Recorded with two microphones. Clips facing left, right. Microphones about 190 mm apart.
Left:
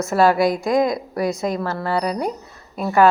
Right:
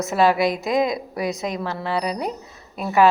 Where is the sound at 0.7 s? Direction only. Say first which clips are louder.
Left 2 dB; 20° right (ahead or behind).